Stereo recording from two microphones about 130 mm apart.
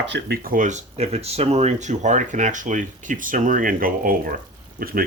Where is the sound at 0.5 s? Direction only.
70° right (ahead or behind); by 4.4 s 90° right.